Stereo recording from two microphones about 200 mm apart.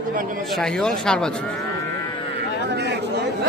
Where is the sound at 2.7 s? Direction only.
60° right (ahead or behind).